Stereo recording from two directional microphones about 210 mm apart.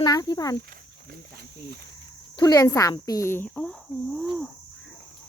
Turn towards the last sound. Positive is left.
turn(degrees=0)  # may be behind; listen again after turning